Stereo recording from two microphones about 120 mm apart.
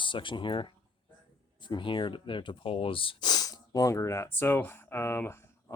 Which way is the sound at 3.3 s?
30° left (ahead or behind).